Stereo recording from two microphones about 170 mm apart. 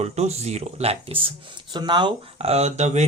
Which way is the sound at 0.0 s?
40° right (ahead or behind).